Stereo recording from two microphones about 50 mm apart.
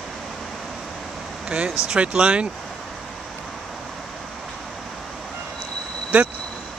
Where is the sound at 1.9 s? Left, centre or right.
Right.